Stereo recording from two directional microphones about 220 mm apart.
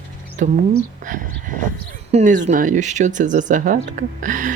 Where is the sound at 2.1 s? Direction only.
30° right (ahead or behind).